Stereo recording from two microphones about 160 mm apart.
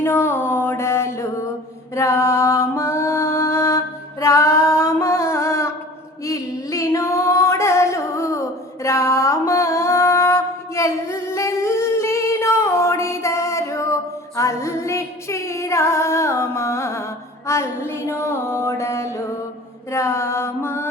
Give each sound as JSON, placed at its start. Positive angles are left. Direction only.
{"t": 0.0, "sound": "mantra", "side_deg": 15}
{"t": 2.0, "sound": "music", "side_deg": 20}